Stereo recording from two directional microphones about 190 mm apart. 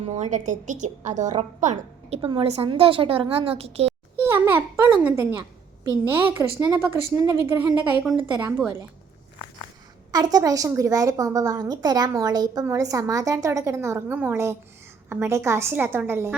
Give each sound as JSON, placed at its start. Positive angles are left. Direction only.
{"t": 0.0, "sound": "a woman's voice", "side_deg": -35}
{"t": 4.3, "sound": "a sound", "side_deg": -10}
{"t": 5.1, "sound": "a woman's voice", "side_deg": -15}
{"t": 10.1, "sound": "a woman's voice", "side_deg": -20}